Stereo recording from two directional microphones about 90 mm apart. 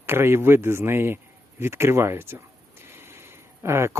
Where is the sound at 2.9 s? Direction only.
25° right (ahead or behind).